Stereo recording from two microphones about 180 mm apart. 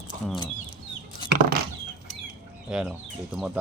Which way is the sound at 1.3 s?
60° right (ahead or behind).